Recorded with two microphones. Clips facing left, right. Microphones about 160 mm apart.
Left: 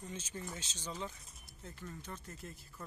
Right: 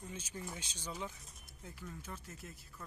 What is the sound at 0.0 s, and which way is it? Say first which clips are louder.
Speech: left 1 dB; 10° right (ahead or behind).